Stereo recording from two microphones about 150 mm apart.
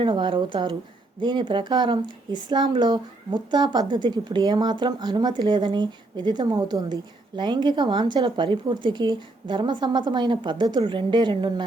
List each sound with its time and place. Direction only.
0.0 s speech: 30° right (ahead or behind)